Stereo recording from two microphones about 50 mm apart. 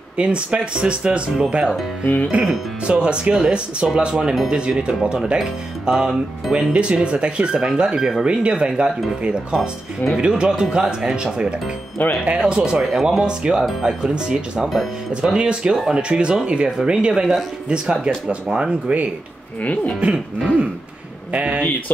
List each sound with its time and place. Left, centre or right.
0.2 s speech: right
2.3 s speech: right
6.5 s speech: right
12.0 s speech: left
12.4 s speech: centre
13.6 s speech: centre
13.8 s speech: centre
14.7 s speech: centre
15.3 s speech: right
17.6 s speech: centre
20.0 s speech: right